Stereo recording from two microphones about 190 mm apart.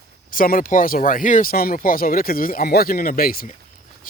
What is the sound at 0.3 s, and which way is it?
A man's voice, 45° left (ahead or behind).